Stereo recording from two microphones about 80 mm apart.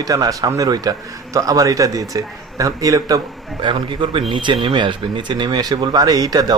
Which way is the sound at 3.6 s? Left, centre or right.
Right.